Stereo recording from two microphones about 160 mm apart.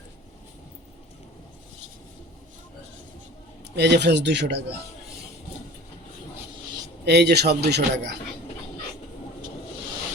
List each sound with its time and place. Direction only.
3.8 s a man's voice: 90° right
7.0 s a man's voice: 90° right